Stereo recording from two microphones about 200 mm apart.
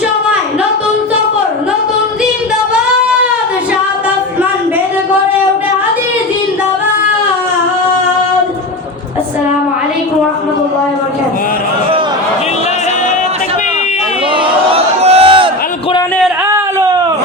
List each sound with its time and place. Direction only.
14.7 s crowd: 30° right (ahead or behind)